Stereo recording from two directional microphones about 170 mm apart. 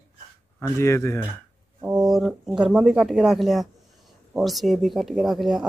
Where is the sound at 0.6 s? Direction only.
15° left (ahead or behind).